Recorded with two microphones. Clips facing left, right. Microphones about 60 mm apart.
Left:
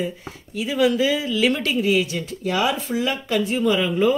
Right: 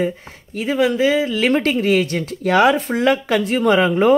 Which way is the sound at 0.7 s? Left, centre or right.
Right.